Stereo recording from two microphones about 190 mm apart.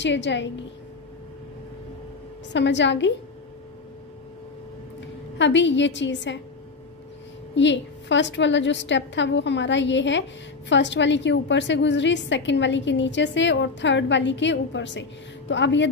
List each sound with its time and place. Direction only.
0.0 s a woman's voice: 70° left (ahead or behind)
2.5 s a woman's voice: 70° left (ahead or behind)
5.4 s a woman's voice: 70° left (ahead or behind)
7.5 s a woman's voice: 70° left (ahead or behind)